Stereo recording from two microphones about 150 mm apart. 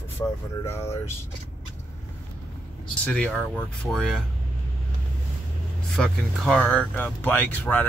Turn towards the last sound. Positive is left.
turn(degrees=10)  # may be behind; listen again after turning